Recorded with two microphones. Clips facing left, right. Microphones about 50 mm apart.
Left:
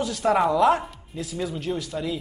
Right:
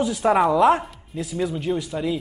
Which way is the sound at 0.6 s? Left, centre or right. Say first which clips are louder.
Right 2 dB; right.